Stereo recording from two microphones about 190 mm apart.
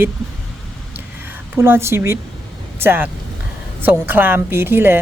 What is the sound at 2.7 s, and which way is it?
A woman's voice, 10° right (ahead or behind).